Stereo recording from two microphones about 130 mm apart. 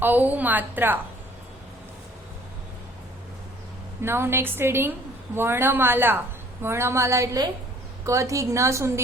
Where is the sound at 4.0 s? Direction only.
20° right (ahead or behind).